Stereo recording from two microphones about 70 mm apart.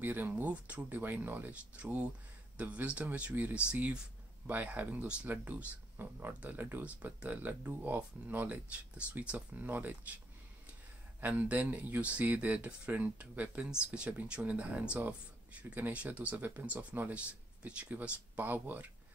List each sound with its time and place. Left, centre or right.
0.0 s speech: right
11.1 s speech: right